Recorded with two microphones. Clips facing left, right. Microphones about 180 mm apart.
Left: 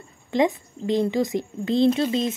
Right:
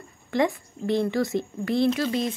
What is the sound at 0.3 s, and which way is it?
Speech, 20° left (ahead or behind).